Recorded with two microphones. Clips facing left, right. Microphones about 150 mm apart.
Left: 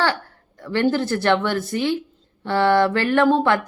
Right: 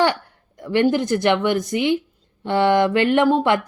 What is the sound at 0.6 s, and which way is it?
A woman's voice, 15° right (ahead or behind).